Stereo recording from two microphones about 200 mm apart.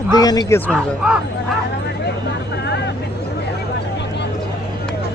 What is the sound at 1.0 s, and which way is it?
Speech, 5° right (ahead or behind).